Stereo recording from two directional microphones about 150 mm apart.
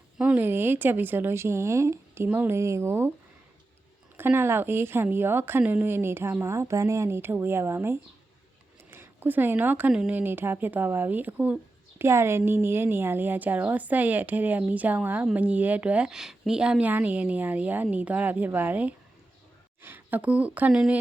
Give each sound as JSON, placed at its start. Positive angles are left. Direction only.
{"t": 0.2, "sound": "speech", "side_deg": -10}
{"t": 4.2, "sound": "speech", "side_deg": -15}